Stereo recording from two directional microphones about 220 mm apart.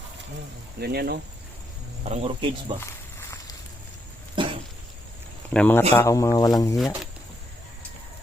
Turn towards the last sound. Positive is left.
turn(degrees=0)  # may be behind; listen again after turning